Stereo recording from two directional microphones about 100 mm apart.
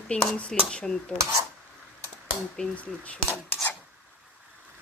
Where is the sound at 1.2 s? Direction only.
30° right (ahead or behind).